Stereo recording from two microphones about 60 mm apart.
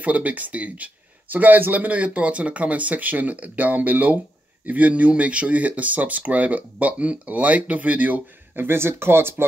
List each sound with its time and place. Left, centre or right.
0.0 s speech: right
8.6 s speech: right